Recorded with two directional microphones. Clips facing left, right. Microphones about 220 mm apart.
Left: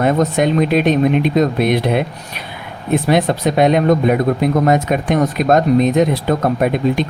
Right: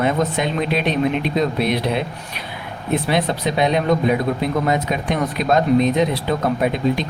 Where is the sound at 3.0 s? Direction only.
45° left (ahead or behind).